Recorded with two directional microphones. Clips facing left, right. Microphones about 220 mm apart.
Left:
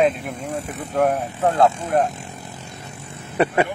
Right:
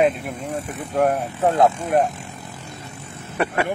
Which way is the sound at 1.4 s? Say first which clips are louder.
Even; 15° right (ahead or behind).